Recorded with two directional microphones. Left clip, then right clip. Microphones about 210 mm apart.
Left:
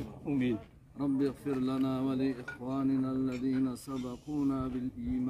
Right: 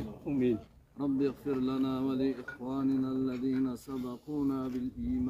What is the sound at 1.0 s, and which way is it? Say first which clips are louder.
Speech: even; centre (ahead or behind).